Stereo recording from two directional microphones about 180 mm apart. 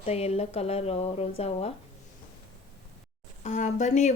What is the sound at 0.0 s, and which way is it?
Speech, 35° left (ahead or behind).